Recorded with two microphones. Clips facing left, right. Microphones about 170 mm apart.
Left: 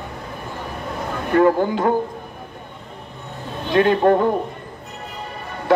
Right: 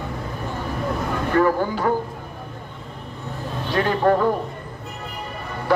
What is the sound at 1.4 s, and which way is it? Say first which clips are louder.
Speech: left 4 dB; 20° left (ahead or behind).